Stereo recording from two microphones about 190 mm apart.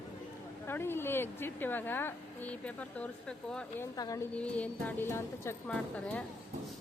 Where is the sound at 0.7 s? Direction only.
10° left (ahead or behind).